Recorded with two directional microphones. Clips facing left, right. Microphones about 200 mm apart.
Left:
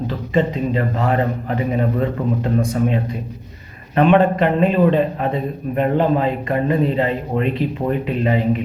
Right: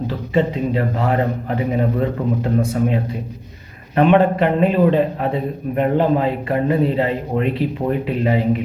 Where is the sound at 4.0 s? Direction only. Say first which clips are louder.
Even; 10° right (ahead or behind).